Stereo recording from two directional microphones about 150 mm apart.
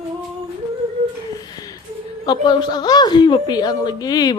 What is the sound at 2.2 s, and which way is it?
Speech, 30° left (ahead or behind).